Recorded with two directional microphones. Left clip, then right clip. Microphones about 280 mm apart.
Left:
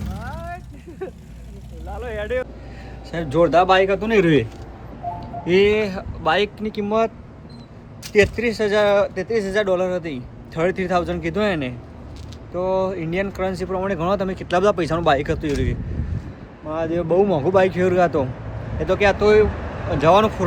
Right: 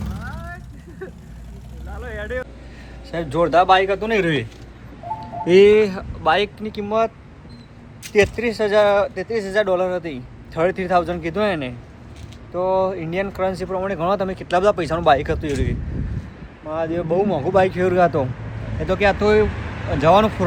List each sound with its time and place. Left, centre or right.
0.0 s a sound: centre
1.9 s vehicle: centre
3.1 s speech: centre
5.5 s speech: centre
8.1 s speech: centre